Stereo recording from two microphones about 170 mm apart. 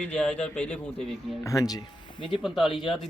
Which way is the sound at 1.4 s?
20° left (ahead or behind).